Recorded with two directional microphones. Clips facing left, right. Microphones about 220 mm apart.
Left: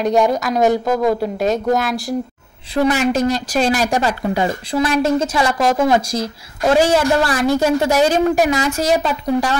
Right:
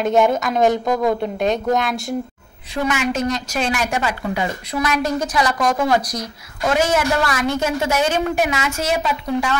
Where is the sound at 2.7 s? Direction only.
35° left (ahead or behind).